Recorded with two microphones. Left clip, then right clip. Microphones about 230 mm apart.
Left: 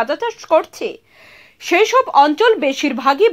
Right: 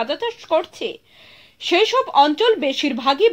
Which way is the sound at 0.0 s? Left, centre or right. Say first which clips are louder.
Left 4 dB; left.